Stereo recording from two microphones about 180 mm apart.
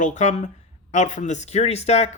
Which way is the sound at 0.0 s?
40° left (ahead or behind).